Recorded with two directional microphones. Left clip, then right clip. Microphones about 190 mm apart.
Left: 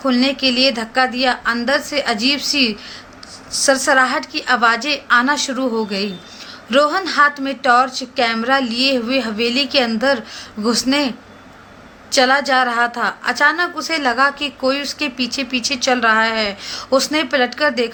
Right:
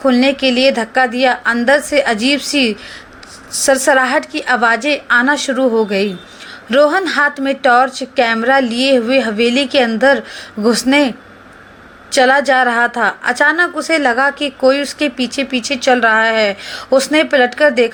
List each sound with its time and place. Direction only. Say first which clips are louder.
0.0 s a woman's voice: right 4 dB; 20° right (ahead or behind)
12.1 s a woman's voice: right 3 dB; 20° right (ahead or behind)